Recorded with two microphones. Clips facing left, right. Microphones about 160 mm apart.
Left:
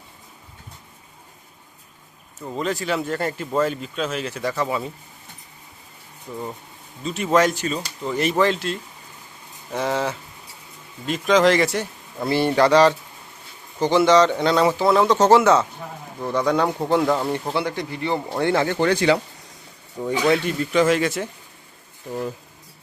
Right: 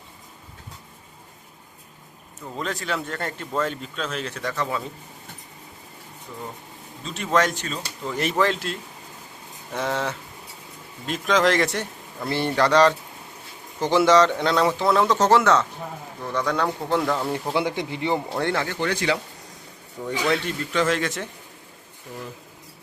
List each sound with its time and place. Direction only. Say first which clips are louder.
2.6 s speech: left 4 dB; 5° left (ahead or behind)
7.0 s speech: left 4 dB; 5° left (ahead or behind)
17.5 s speech: even; 15° right (ahead or behind)
18.3 s speech: left 3 dB; 5° left (ahead or behind)
18.8 s speech: left 7 dB; 35° left (ahead or behind)
20.3 s speech: left 5 dB; 10° left (ahead or behind)